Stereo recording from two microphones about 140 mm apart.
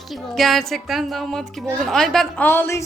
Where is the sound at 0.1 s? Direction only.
Centre (ahead or behind).